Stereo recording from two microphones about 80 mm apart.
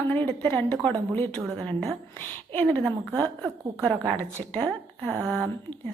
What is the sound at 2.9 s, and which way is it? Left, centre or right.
A woman's voice, centre.